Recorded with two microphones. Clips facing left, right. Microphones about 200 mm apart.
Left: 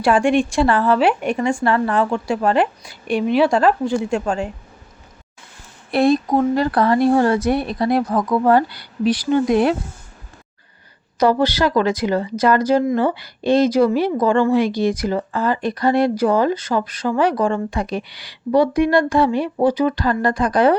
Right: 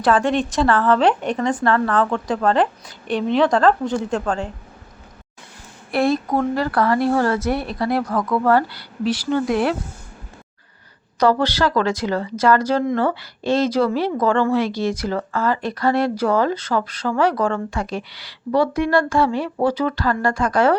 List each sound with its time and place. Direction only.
0.0 s speech: 15° left (ahead or behind)
5.9 s speech: 20° left (ahead or behind)
11.2 s speech: 10° left (ahead or behind)